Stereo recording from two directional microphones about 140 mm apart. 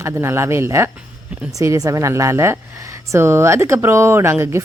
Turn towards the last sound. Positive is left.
turn(degrees=-20)  # may be behind; listen again after turning